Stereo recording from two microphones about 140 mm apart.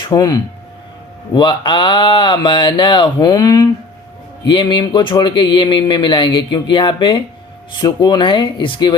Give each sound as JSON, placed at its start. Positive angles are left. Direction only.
{"t": 0.1, "sound": "speech", "side_deg": 25}